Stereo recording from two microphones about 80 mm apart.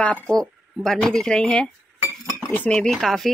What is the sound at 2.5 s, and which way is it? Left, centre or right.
Cutlery, centre.